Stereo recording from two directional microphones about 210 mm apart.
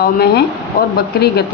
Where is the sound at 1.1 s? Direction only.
50° left (ahead or behind).